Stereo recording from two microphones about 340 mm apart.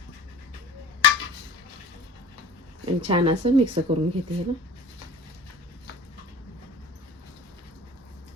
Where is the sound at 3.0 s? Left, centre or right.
Centre.